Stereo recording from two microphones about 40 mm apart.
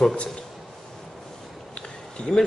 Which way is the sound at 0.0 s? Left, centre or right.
Left.